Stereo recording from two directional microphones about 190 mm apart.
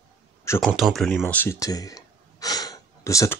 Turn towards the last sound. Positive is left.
turn(degrees=15)  # may be behind; listen again after turning